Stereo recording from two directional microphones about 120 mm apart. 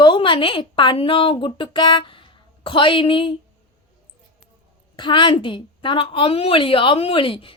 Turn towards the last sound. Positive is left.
turn(degrees=45)  # may be behind; listen again after turning